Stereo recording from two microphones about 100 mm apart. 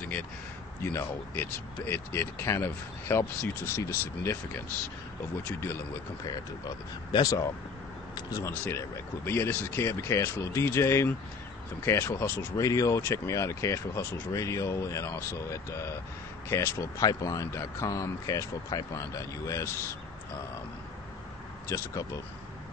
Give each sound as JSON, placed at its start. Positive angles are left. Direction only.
{"t": 0.9, "sound": "speech", "side_deg": 20}
{"t": 7.1, "sound": "speech", "side_deg": 40}
{"t": 12.6, "sound": "speech", "side_deg": 35}
{"t": 21.6, "sound": "speech", "side_deg": 30}